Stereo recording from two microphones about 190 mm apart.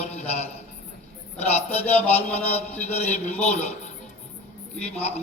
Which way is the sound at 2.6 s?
35° left (ahead or behind).